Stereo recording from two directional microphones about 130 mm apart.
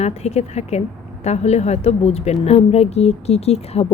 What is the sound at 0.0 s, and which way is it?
A woman's voice, 55° left (ahead or behind).